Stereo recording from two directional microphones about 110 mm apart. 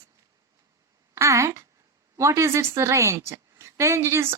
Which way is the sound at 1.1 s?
30° right (ahead or behind).